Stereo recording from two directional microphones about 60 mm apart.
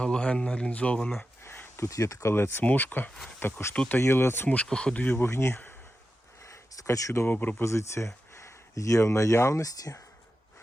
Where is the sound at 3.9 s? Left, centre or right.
Left.